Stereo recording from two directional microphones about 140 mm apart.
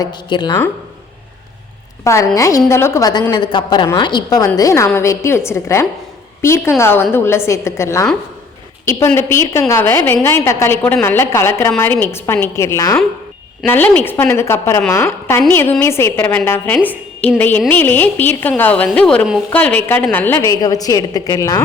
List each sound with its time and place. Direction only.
0.0 s a woman's voice: 30° left (ahead or behind)
2.0 s a woman's voice: 20° left (ahead or behind)